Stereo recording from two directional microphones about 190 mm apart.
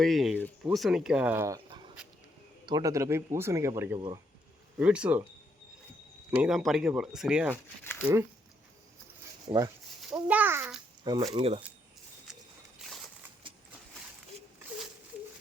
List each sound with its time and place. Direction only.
0.0 s speech: centre (ahead or behind)
6.3 s speech: 5° right (ahead or behind)
7.5 s speech: 10° left (ahead or behind)
8.0 s speech: 15° right (ahead or behind)
9.5 s speech: 20° right (ahead or behind)
10.0 s speech: 5° right (ahead or behind)
11.0 s speech: 20° right (ahead or behind)
14.3 s a sound: 35° right (ahead or behind)